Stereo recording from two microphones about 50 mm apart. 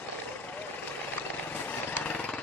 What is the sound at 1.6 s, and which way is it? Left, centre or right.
Vehicle, left.